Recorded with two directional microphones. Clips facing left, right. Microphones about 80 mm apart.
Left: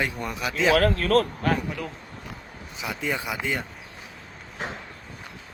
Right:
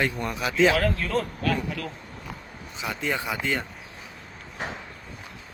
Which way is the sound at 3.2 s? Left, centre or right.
Centre.